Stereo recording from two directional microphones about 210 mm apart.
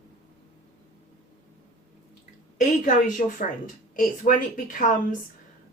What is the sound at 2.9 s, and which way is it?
Speech, 35° left (ahead or behind).